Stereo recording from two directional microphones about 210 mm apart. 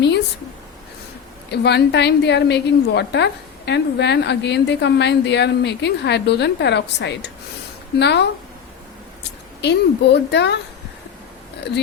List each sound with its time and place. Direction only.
1.5 s a woman's voice: 50° left (ahead or behind)
9.6 s a woman's voice: 55° left (ahead or behind)